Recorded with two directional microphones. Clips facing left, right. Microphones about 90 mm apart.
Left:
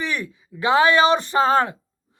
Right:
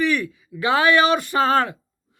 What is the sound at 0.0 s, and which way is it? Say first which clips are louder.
Speech: right 6 dB; 20° left (ahead or behind).